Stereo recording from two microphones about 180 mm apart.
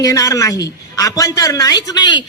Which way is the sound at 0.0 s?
20° left (ahead or behind).